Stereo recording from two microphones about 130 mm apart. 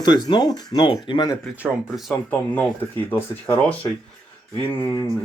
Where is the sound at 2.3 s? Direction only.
15° left (ahead or behind).